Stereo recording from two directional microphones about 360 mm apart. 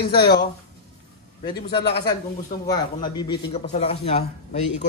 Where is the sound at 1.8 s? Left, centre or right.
Left.